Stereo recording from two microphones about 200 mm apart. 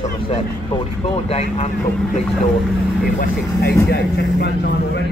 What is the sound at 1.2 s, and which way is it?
Speech, 35° left (ahead or behind).